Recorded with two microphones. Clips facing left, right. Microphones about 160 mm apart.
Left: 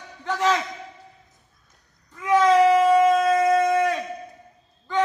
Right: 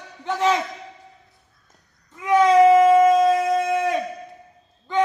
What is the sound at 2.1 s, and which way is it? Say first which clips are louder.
Wail: right 2 dB; 20° right (ahead or behind).